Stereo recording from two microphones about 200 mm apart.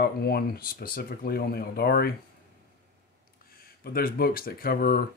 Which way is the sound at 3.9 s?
45° left (ahead or behind).